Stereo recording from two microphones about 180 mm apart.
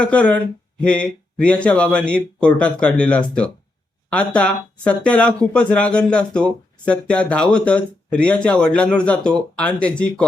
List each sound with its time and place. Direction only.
0.0 s speech: 5° left (ahead or behind)